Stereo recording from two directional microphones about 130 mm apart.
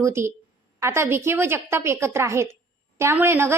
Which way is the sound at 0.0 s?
20° right (ahead or behind).